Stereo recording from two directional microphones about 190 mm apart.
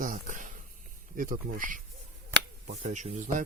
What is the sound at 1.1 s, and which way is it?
Speech, 45° right (ahead or behind).